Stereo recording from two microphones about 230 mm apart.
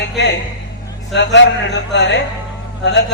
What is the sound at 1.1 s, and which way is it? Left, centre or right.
A man's voice, left.